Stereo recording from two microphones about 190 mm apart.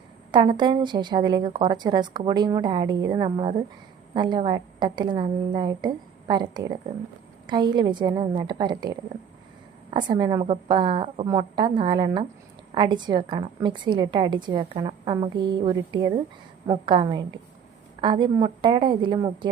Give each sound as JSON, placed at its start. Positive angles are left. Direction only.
{"t": 0.3, "sound": "a woman's voice", "side_deg": -25}